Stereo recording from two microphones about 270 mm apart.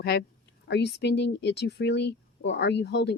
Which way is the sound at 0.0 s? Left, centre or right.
Left.